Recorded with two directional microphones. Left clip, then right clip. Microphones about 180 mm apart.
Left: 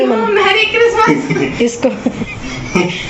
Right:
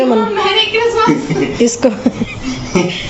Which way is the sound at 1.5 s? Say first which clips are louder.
Right 5 dB; 20° right (ahead or behind).